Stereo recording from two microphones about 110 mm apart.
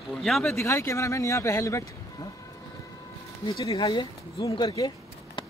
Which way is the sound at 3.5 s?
35° left (ahead or behind).